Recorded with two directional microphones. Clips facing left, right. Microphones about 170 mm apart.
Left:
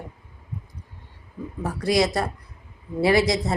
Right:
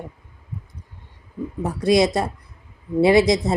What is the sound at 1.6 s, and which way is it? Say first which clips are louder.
Speech: right 4 dB; 20° right (ahead or behind).